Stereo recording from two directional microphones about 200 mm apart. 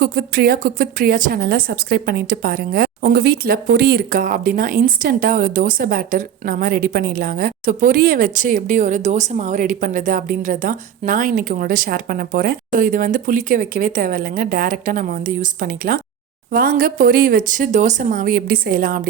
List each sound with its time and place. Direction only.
0.0 s speech: 50° right (ahead or behind)